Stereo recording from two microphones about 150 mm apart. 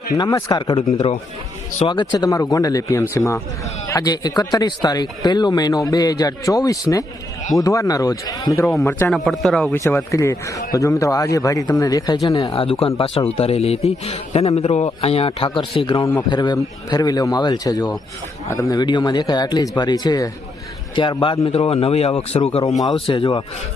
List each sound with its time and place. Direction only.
0.2 s speech: 25° left (ahead or behind)
1.9 s speech: 30° left (ahead or behind)
9.0 s a man's voice: centre (ahead or behind)
9.7 s speech: 20° left (ahead or behind)
12.5 s a man's voice: 40° left (ahead or behind)
16.0 s a man's voice: 25° left (ahead or behind)